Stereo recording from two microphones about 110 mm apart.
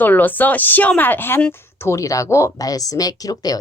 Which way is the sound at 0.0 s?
15° left (ahead or behind).